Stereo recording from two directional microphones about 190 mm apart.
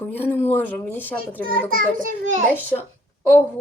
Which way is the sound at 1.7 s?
45° right (ahead or behind).